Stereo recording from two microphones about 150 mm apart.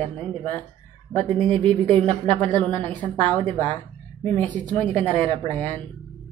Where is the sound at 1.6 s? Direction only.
30° right (ahead or behind).